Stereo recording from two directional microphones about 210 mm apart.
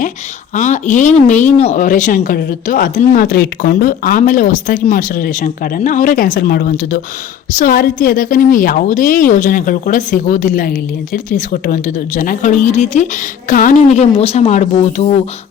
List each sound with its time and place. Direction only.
0.5 s a woman's voice: 35° left (ahead or behind)